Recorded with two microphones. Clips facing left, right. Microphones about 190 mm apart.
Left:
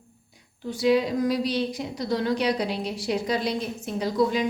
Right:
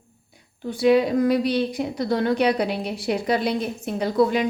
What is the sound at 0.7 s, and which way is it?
Speech, 60° right (ahead or behind).